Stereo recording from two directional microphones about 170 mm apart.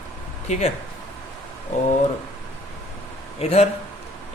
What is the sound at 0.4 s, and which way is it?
Speech, 40° left (ahead or behind).